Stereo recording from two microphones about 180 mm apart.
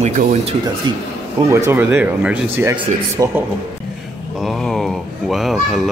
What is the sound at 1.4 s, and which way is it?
Speech, 15° right (ahead or behind).